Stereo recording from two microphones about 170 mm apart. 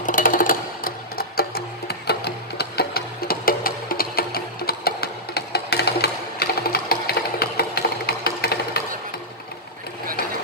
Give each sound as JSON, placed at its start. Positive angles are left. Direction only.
{"t": 0.0, "sound": "music", "side_deg": 50}